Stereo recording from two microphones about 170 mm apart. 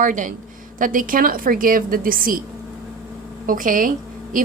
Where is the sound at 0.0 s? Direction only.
50° right (ahead or behind).